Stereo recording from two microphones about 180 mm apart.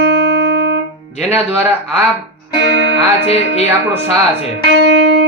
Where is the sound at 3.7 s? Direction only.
10° right (ahead or behind).